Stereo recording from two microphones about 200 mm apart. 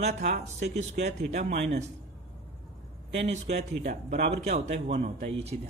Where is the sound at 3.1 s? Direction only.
35° right (ahead or behind).